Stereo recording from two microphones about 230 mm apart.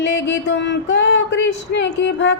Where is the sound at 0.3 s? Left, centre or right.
Left.